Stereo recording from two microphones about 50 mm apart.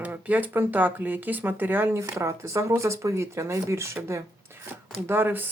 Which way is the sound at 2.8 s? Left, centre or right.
Right.